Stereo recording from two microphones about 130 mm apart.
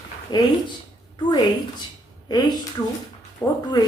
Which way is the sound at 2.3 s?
30° left (ahead or behind).